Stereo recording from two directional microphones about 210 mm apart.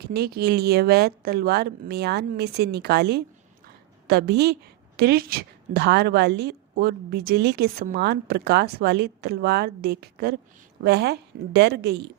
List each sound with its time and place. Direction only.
0.0 s a woman's voice: 50° right (ahead or behind)